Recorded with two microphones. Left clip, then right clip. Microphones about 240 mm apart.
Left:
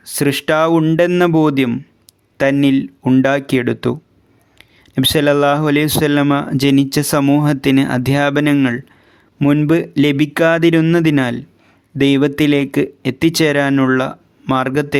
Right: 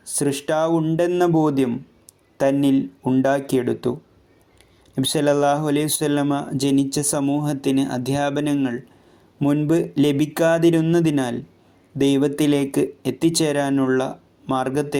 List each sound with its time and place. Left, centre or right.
0.0 s speech: left
4.9 s speech: left